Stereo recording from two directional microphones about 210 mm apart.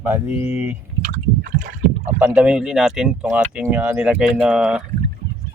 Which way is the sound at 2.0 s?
10° right (ahead or behind).